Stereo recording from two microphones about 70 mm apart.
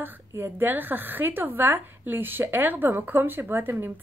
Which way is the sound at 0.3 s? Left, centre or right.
Right.